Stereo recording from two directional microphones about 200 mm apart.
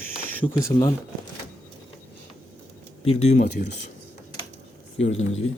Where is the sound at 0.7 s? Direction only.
20° left (ahead or behind).